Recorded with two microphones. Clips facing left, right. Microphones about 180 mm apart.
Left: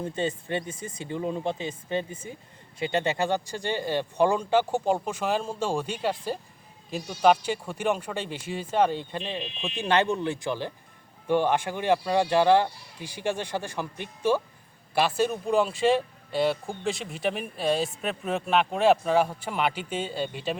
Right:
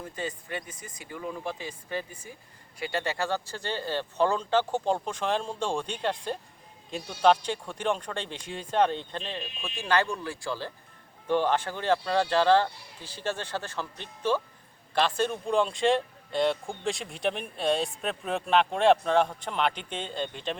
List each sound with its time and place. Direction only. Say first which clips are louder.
0.0 s speech: left 6 dB; 25° left (ahead or behind); by 20.6 s 5° left (ahead or behind)